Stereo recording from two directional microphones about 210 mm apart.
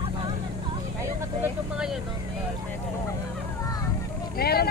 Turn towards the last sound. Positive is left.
turn(degrees=45)  # may be behind; listen again after turning